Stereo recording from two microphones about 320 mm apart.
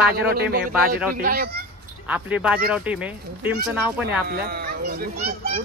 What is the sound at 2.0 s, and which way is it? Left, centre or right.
Speech, centre.